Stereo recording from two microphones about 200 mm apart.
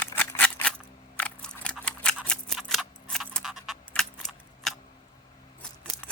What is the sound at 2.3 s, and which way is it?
Keys jangling, centre (ahead or behind).